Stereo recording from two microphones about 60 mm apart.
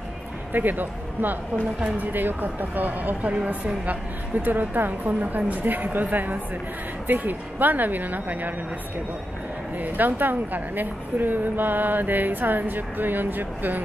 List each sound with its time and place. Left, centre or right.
0.5 s a woman's voice: right
9.8 s a woman's voice: right